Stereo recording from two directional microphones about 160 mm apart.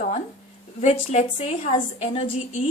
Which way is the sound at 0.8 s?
45° left (ahead or behind).